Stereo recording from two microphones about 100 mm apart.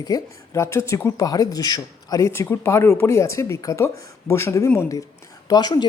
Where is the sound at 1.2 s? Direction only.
40° left (ahead or behind).